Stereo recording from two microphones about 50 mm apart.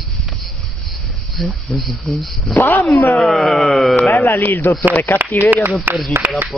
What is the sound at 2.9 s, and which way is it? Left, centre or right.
Speech, left.